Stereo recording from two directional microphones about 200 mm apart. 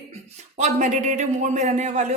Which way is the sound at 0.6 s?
35° right (ahead or behind).